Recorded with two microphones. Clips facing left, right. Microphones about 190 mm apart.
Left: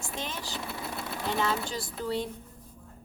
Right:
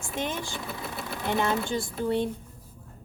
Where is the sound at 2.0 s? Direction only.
20° right (ahead or behind).